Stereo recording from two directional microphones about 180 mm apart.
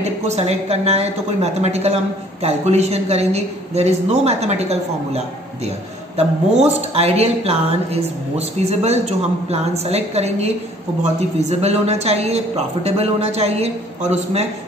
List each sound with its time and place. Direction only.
0.0 s a woman's voice: 35° right (ahead or behind)